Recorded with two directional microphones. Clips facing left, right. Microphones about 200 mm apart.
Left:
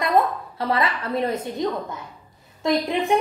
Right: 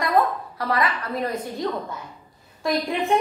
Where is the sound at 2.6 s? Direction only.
20° left (ahead or behind).